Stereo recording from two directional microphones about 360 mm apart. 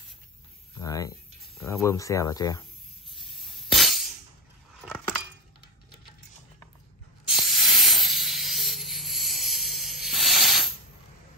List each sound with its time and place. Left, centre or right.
0.7 s speech: centre
3.1 s glass: centre
7.2 s a sound: centre